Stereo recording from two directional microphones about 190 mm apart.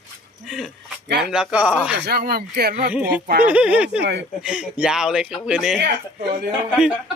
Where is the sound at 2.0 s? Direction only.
55° right (ahead or behind).